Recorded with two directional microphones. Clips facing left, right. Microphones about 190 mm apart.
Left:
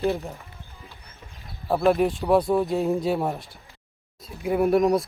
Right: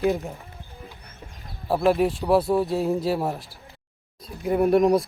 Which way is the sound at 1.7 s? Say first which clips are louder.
Even; centre (ahead or behind).